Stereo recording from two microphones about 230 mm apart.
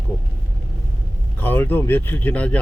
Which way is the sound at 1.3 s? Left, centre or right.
Centre.